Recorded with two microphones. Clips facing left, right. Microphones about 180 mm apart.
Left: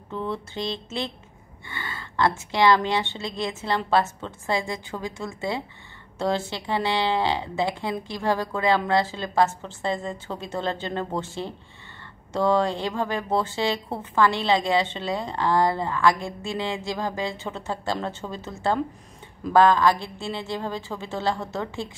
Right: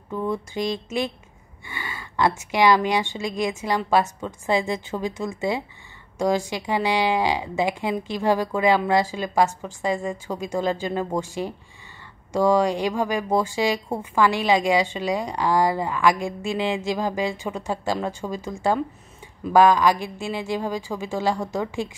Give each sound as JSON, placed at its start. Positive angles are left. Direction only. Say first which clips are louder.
{"t": 0.1, "sound": "a woman's voice", "louder": "right 4 dB", "side_deg": -10}
{"t": 12.3, "sound": "a woman's voice", "louder": "right 3 dB", "side_deg": -10}